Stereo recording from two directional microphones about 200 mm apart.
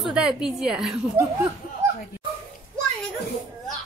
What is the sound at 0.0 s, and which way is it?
Speech, 5° right (ahead or behind).